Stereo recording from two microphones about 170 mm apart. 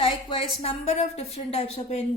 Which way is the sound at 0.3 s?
35° left (ahead or behind).